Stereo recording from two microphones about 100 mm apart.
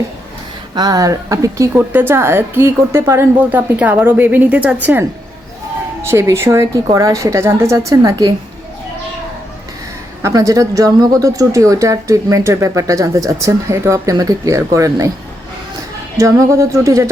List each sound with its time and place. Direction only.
0.8 s speech: 35° right (ahead or behind)
1.7 s a woman's voice: 20° right (ahead or behind)
6.0 s a woman's voice: 30° right (ahead or behind)
10.2 s speech: 35° right (ahead or behind)
16.1 s speech: 30° right (ahead or behind)